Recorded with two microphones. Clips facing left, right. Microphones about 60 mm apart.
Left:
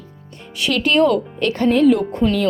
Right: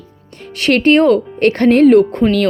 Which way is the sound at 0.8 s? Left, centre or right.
Right.